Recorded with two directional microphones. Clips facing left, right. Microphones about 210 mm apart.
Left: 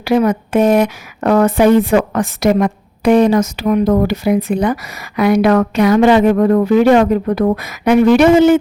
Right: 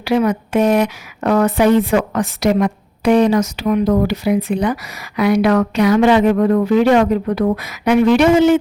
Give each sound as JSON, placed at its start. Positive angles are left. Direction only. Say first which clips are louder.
{"t": 0.0, "sound": "speech", "louder": "left 2 dB", "side_deg": 45}